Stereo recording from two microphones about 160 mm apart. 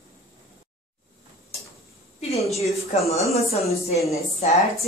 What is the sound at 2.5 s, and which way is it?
Speech, 40° left (ahead or behind).